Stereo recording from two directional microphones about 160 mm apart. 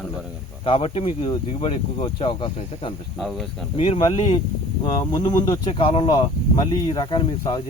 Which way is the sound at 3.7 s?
35° left (ahead or behind).